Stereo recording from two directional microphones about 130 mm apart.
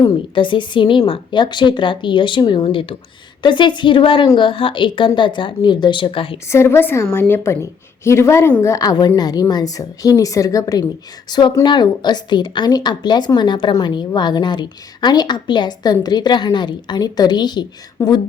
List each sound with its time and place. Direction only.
0.1 s speech: 40° left (ahead or behind)
6.5 s a woman's voice: 20° left (ahead or behind)